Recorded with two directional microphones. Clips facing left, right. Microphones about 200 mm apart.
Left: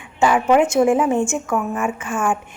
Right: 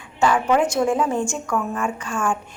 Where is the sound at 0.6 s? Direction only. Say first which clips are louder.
Left 4 dB; 10° left (ahead or behind).